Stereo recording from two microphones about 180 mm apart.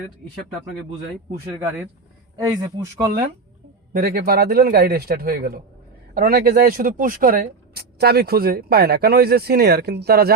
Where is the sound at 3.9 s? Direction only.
55° right (ahead or behind).